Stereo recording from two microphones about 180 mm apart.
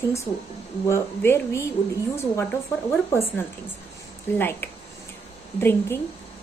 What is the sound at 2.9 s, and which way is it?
A woman's voice, 10° left (ahead or behind).